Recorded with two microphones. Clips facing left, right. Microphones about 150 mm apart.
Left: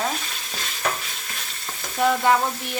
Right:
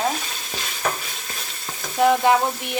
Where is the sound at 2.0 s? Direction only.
20° right (ahead or behind).